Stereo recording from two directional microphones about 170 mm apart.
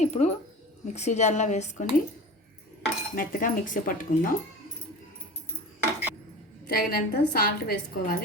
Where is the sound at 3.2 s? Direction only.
55° left (ahead or behind).